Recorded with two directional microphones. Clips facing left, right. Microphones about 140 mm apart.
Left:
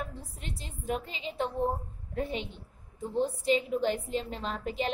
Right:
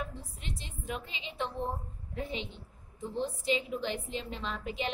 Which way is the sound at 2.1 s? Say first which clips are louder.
Left 4 dB; 40° left (ahead or behind).